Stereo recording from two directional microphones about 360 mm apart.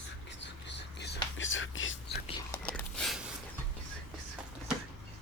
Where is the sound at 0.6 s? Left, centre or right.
Left.